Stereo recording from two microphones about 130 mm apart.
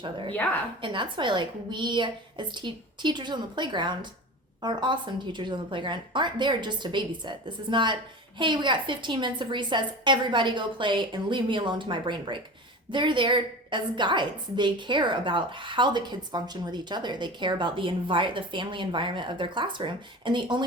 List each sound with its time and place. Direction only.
0.0 s a woman's voice: 40° right (ahead or behind)